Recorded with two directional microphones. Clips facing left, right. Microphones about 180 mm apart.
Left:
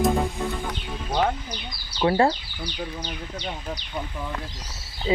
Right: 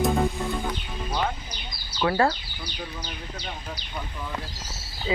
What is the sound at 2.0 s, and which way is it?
Speech, 25° left (ahead or behind).